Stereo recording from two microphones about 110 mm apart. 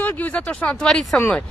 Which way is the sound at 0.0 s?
15° left (ahead or behind).